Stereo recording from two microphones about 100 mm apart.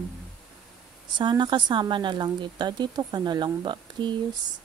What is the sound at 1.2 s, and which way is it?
Speech, 50° right (ahead or behind).